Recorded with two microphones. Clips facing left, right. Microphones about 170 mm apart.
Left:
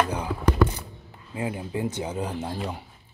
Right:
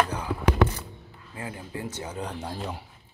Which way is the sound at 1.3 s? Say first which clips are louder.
Left 7 dB; 20° left (ahead or behind).